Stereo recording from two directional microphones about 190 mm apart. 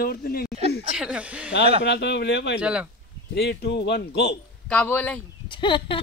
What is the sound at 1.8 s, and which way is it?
Speech, 60° left (ahead or behind).